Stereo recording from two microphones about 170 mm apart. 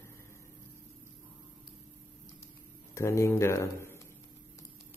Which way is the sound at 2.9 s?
15° left (ahead or behind).